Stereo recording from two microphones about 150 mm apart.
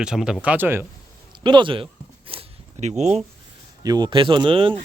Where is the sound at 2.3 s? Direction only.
40° right (ahead or behind).